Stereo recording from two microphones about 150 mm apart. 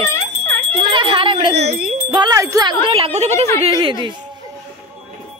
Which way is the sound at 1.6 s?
90° right.